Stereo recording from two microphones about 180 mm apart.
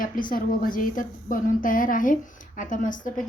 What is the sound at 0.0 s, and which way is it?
A woman's voice, 50° left (ahead or behind).